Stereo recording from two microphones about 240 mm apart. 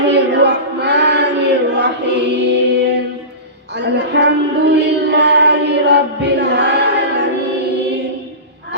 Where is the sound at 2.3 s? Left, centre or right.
Right.